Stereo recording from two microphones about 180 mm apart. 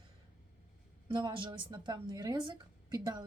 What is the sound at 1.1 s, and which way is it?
A woman's voice, 25° right (ahead or behind).